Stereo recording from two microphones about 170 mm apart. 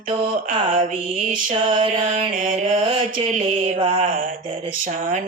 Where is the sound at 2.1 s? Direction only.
50° right (ahead or behind).